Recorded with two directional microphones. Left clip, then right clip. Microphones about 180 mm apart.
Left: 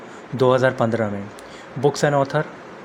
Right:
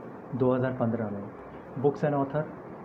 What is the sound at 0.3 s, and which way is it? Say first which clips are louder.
Speech: left 10 dB; 50° left (ahead or behind).